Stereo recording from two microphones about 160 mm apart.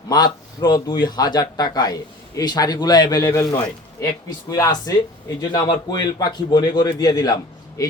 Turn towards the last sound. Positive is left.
turn(degrees=20)  # may be behind; listen again after turning